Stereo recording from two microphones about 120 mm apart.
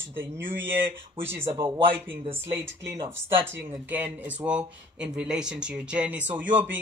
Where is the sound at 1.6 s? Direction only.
50° right (ahead or behind).